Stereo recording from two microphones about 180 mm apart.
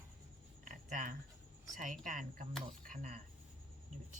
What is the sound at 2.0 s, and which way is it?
Speech, 45° right (ahead or behind).